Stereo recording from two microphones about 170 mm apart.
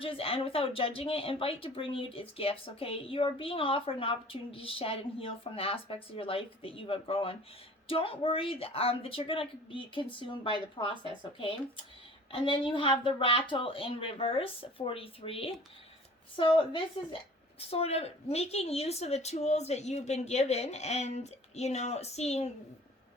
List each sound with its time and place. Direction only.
0.0 s speech: 35° left (ahead or behind)